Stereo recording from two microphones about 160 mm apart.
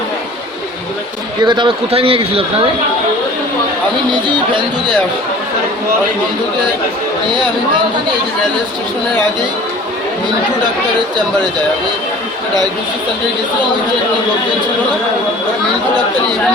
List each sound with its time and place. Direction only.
1.5 s a man's voice: 30° right (ahead or behind)